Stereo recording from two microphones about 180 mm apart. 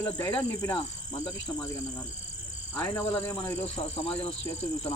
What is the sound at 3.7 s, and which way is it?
Speech, 35° left (ahead or behind).